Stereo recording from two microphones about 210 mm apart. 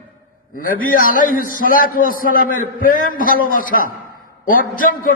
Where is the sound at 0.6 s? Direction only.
40° left (ahead or behind).